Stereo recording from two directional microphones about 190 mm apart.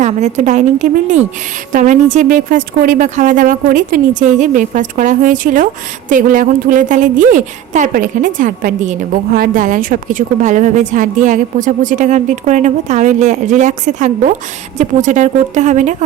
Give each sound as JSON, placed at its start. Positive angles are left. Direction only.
{"t": 0.0, "sound": "a woman's voice", "side_deg": -40}